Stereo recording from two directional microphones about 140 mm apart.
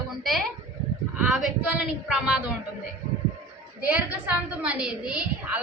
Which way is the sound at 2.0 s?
5° right (ahead or behind).